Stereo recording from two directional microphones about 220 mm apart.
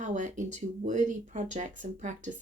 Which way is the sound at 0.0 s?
35° right (ahead or behind).